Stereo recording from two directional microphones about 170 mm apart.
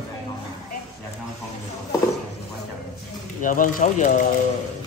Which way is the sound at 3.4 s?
50° left (ahead or behind).